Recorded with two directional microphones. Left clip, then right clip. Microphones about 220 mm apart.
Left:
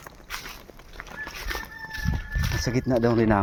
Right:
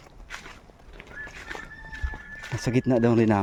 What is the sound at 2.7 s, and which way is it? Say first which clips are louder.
Speech: right 1 dB; 25° right (ahead or behind).